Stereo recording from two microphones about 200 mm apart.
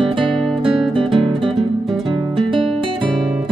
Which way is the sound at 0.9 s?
25° right (ahead or behind).